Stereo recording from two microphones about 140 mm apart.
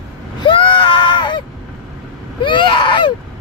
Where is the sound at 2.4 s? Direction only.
35° left (ahead or behind).